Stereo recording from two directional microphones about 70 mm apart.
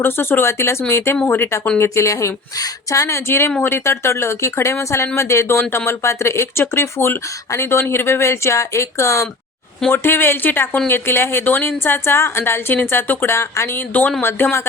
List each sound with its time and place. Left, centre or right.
0.0 s speech: left
1.8 s speech: left